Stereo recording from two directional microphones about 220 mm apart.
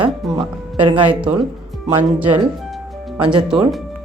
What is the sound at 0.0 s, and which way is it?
Speech, 5° right (ahead or behind).